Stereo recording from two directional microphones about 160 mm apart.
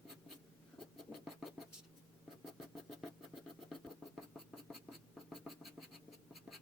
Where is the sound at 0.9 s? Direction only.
Centre (ahead or behind).